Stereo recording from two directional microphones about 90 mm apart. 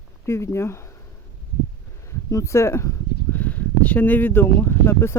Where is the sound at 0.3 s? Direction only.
30° left (ahead or behind).